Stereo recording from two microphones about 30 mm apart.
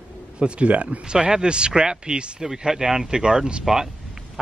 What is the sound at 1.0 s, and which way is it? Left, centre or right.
Speech, right.